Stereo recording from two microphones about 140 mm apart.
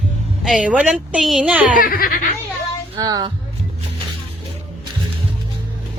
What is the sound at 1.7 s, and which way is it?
Speech, 90° left.